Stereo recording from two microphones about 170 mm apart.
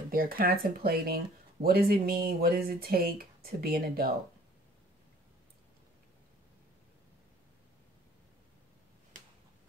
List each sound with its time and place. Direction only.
0.1 s speech: 60° right (ahead or behind)